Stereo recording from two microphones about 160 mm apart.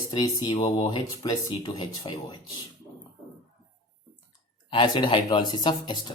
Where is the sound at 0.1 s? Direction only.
25° left (ahead or behind).